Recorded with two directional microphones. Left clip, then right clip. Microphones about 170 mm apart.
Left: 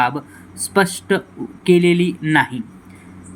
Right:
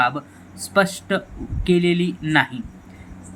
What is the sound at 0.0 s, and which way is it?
Speech, 20° left (ahead or behind).